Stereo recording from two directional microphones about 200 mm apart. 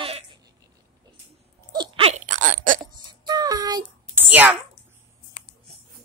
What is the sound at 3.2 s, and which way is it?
Child singing, 20° right (ahead or behind).